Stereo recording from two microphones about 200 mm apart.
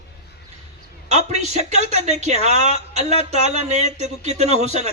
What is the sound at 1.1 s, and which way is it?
A man's voice, 35° right (ahead or behind).